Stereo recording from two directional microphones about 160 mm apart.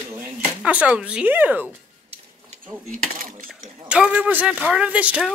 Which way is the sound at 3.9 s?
5° right (ahead or behind).